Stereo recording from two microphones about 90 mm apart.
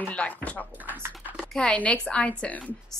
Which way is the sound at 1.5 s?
15° left (ahead or behind).